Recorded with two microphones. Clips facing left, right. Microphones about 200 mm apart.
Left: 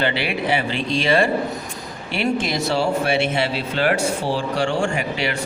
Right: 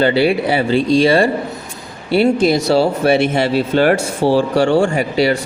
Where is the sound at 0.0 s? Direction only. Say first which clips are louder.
Right 9 dB; 35° right (ahead or behind).